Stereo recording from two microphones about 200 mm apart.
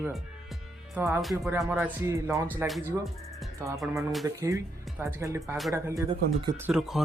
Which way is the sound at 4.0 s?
Centre (ahead or behind).